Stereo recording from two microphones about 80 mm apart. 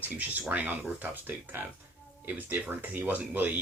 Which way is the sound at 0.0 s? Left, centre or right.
Right.